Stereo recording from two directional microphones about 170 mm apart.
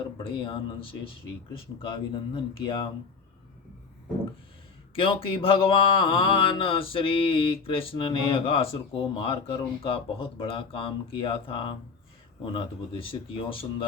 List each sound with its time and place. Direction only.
0.2 s speech: 30° left (ahead or behind)
4.9 s speech: 30° left (ahead or behind)